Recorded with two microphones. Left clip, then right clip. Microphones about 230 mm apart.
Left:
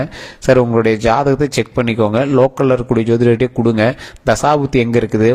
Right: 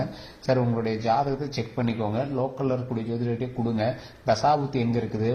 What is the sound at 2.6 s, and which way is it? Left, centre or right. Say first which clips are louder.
A man's voice: left 14 dB; left.